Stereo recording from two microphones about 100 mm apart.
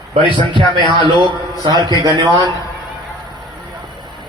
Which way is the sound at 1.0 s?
55° right (ahead or behind).